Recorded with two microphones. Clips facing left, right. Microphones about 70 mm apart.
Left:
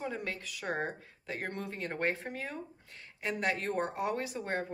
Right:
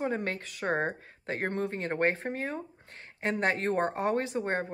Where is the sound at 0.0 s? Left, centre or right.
Right.